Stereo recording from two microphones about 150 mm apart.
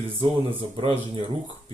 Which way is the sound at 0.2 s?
35° right (ahead or behind).